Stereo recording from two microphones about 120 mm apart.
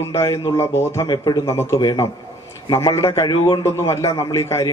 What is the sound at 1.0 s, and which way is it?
A man's voice, 35° left (ahead or behind).